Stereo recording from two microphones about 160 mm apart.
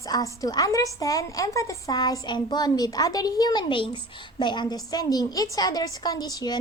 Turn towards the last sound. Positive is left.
turn(degrees=25)  # may be behind; listen again after turning